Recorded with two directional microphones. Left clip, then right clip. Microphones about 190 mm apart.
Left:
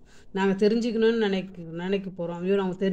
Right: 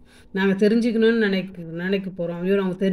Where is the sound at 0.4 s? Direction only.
5° right (ahead or behind).